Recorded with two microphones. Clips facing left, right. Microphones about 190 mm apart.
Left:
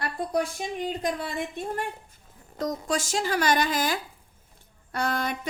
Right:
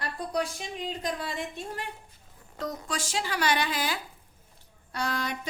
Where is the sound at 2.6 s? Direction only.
40° left (ahead or behind).